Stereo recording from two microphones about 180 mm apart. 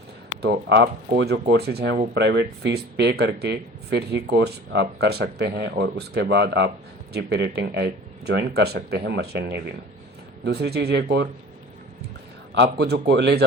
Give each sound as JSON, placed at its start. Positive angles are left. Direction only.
{"t": 0.4, "sound": "speech", "side_deg": -75}
{"t": 12.5, "sound": "speech", "side_deg": -75}